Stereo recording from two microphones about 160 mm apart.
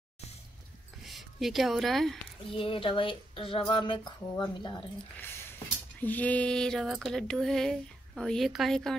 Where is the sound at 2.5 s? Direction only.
35° left (ahead or behind).